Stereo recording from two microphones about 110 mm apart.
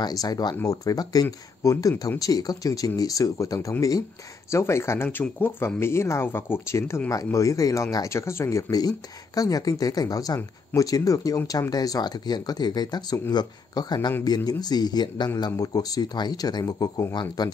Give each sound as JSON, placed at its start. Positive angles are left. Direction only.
{"t": 0.0, "sound": "speech", "side_deg": 35}